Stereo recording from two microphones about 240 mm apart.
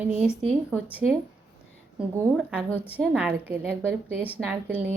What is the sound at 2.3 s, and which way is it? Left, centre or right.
A woman's voice, centre.